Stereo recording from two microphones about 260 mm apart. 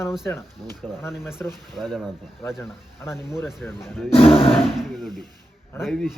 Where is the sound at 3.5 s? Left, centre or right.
Centre.